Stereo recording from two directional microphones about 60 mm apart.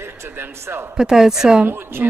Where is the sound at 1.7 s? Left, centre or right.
Right.